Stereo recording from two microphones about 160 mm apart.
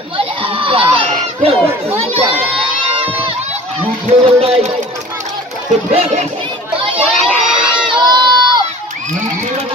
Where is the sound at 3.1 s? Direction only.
35° right (ahead or behind).